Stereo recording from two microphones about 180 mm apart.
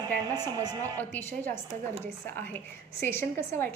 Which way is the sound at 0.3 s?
20° right (ahead or behind).